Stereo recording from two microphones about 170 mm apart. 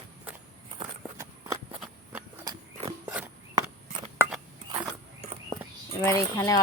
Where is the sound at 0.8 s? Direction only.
15° right (ahead or behind).